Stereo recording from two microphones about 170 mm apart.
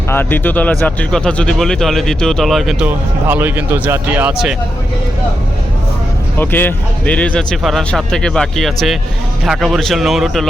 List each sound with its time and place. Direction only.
0.1 s speech: 10° left (ahead or behind); by 4.5 s 5° right (ahead or behind)
6.4 s speech: 10° left (ahead or behind)